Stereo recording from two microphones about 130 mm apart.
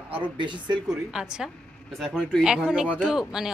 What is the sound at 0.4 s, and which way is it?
Speech, 40° right (ahead or behind).